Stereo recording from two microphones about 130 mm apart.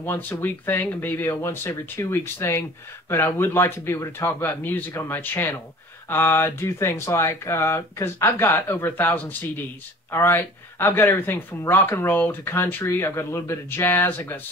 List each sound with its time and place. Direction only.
0.0 s speech: 15° left (ahead or behind)